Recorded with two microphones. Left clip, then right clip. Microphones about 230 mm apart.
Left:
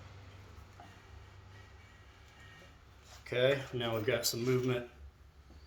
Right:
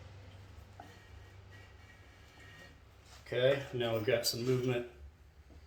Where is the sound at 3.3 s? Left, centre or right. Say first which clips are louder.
Even; left.